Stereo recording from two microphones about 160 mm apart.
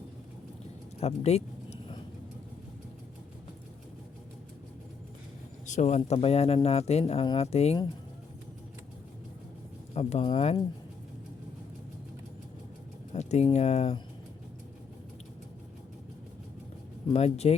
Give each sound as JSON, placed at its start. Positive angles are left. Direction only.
{"t": 0.9, "sound": "a sound", "side_deg": 40}
{"t": 5.6, "sound": "speech", "side_deg": 50}
{"t": 6.0, "sound": "speech", "side_deg": 35}
{"t": 9.9, "sound": "speech", "side_deg": 40}
{"t": 13.1, "sound": "speech", "side_deg": 45}
{"t": 17.1, "sound": "speech", "side_deg": 40}